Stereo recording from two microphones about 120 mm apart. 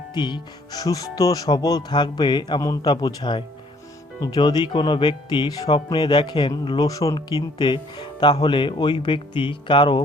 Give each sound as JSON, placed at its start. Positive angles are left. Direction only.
{"t": 0.1, "sound": "speech", "side_deg": 40}